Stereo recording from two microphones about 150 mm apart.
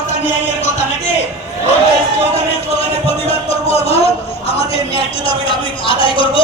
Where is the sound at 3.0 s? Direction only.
40° left (ahead or behind).